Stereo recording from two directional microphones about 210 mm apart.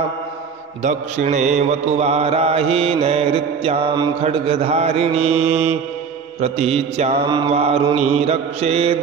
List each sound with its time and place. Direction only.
0.8 s mantra: 35° right (ahead or behind)